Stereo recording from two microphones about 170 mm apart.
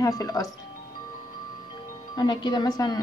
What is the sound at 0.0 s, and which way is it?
Speech, 20° left (ahead or behind).